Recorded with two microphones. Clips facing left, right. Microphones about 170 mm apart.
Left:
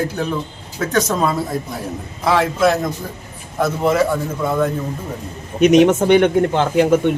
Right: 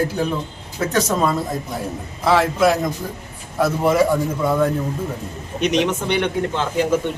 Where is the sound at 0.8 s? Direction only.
5° right (ahead or behind).